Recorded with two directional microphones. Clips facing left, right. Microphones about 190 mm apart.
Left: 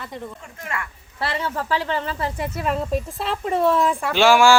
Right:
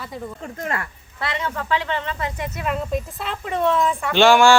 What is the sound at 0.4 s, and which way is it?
Speech, 35° right (ahead or behind).